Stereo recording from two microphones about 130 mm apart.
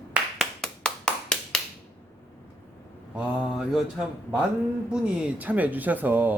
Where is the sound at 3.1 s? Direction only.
5° right (ahead or behind).